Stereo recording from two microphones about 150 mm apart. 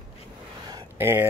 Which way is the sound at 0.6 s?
20° right (ahead or behind).